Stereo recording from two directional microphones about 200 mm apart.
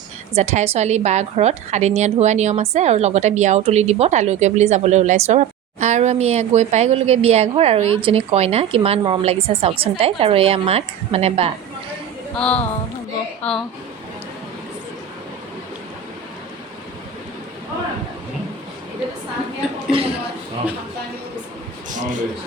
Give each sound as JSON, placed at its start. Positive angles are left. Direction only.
{"t": 0.3, "sound": "a woman's voice", "side_deg": -30}
{"t": 12.4, "sound": "speech", "side_deg": 5}
{"t": 19.9, "sound": "speech", "side_deg": -30}
{"t": 21.8, "sound": "a sound", "side_deg": -40}